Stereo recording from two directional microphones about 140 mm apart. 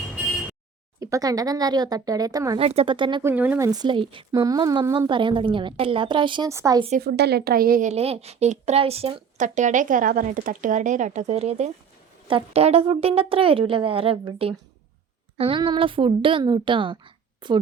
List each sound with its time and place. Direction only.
0.9 s speech: 25° right (ahead or behind)
2.6 s a woman's voice: 45° right (ahead or behind)
3.2 s speech: 15° right (ahead or behind)
3.7 s a woman's voice: 30° right (ahead or behind)
4.3 s a woman's voice: 25° right (ahead or behind)
6.5 s speech: 20° right (ahead or behind)
7.4 s speech: 90° right
7.9 s speech: 45° right (ahead or behind)
9.4 s a woman's voice: 60° right (ahead or behind); by 17.6 s 35° right (ahead or behind)